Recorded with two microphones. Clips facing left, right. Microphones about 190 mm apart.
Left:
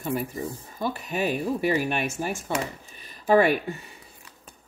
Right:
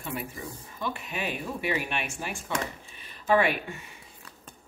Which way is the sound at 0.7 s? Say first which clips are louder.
Left 6 dB; 40° left (ahead or behind).